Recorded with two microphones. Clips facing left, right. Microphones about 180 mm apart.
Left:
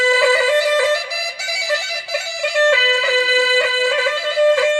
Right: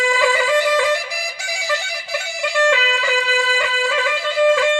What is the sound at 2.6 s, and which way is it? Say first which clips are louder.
Music: left 3 dB; 35° left (ahead or behind).